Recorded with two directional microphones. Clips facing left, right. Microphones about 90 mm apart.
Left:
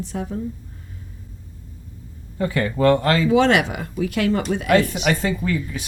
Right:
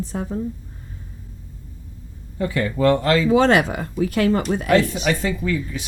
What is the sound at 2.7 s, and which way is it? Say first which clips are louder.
Speech: left 1 dB; 50° left (ahead or behind).